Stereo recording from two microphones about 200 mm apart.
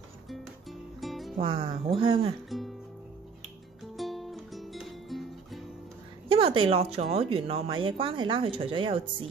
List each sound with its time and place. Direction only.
0.3 s music: centre (ahead or behind)
1.4 s speech: 25° right (ahead or behind)
3.9 s music: centre (ahead or behind)
6.2 s speech: 25° right (ahead or behind)